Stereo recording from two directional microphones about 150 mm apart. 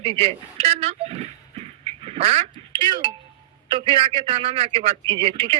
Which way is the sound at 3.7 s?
35° right (ahead or behind).